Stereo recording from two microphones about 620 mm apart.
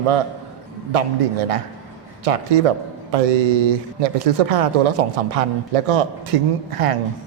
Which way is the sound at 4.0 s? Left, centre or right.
Right.